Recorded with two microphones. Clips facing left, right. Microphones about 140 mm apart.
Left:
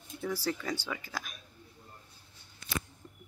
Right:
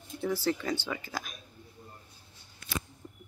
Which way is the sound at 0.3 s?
5° left (ahead or behind).